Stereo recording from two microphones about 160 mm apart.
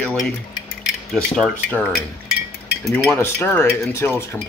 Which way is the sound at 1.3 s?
5° left (ahead or behind).